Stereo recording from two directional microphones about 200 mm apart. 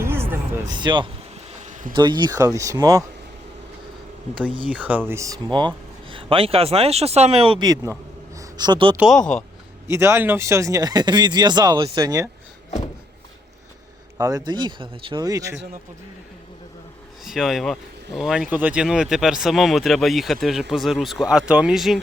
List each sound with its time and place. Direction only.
0.0 s a sound: 10° right (ahead or behind)
0.7 s speech: 20° right (ahead or behind)
1.6 s insect: 40° right (ahead or behind)
2.0 s speech: 20° right (ahead or behind)
4.7 s speech: 10° right (ahead or behind); by 7.8 s 25° right (ahead or behind)
8.4 s a sound: 20° right (ahead or behind)
9.0 s speech: centre (ahead or behind)
9.8 s speech: 15° right (ahead or behind)
14.2 s speech: 20° right (ahead or behind)
17.2 s speech: centre (ahead or behind)